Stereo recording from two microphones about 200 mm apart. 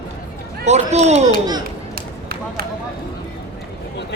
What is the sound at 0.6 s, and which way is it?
Speech, 35° right (ahead or behind).